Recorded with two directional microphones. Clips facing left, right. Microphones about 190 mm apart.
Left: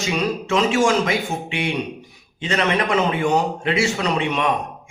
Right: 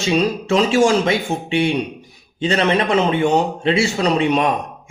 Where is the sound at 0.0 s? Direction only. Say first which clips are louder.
Right 5 dB; 30° right (ahead or behind).